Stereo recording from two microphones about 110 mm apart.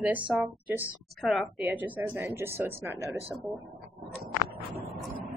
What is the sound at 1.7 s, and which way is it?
Speech, 15° right (ahead or behind).